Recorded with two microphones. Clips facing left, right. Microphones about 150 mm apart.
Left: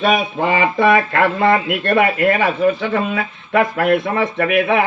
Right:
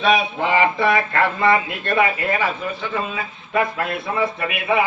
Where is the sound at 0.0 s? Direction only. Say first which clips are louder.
Left 2 dB; 50° left (ahead or behind).